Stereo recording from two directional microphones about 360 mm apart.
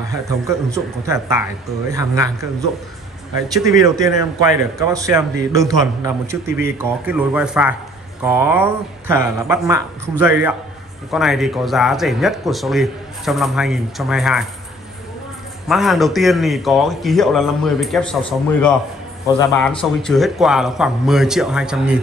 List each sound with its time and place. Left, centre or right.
0.1 s a man's voice: centre
3.8 s a man's voice: centre
15.7 s speech: centre
19.2 s speech: centre